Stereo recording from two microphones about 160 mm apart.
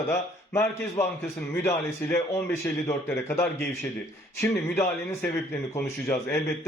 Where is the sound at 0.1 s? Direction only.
15° left (ahead or behind).